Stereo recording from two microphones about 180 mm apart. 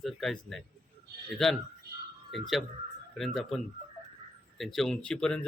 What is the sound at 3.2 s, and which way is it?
Speech, centre (ahead or behind).